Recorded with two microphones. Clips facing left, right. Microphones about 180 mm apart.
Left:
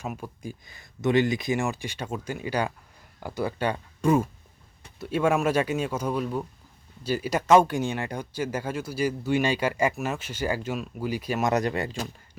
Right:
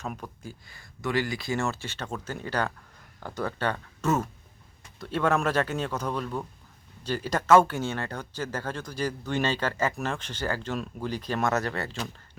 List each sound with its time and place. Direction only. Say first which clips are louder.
0.0 s speech: left 2 dB; 10° left (ahead or behind)